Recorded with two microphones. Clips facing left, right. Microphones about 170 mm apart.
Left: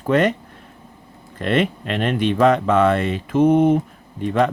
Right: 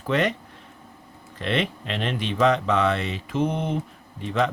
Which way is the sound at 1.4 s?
50° left (ahead or behind).